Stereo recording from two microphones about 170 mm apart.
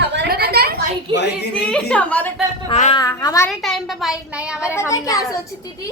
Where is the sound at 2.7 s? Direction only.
40° left (ahead or behind).